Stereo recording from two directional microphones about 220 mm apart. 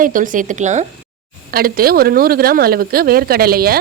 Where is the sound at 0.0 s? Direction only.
35° right (ahead or behind).